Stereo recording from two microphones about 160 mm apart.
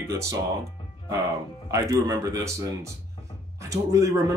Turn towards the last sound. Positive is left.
turn(degrees=-20)  # may be behind; listen again after turning